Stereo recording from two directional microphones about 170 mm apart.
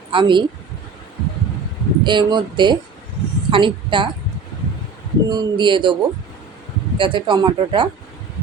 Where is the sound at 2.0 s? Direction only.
25° right (ahead or behind).